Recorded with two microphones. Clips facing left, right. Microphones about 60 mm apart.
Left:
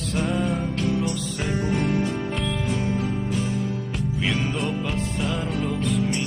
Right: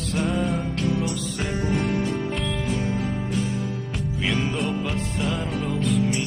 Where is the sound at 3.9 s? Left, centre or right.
Centre.